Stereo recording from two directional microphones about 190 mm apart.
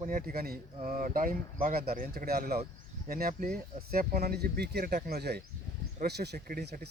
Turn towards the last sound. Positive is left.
turn(degrees=-60)  # may be behind; listen again after turning